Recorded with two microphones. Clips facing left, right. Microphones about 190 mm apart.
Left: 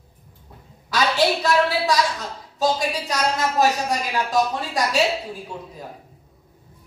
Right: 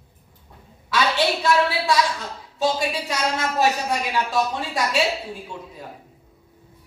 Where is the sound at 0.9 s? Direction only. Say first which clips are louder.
Left 1 dB; 40° left (ahead or behind).